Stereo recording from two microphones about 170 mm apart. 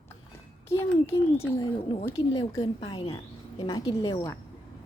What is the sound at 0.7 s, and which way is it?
A woman's voice, 15° left (ahead or behind).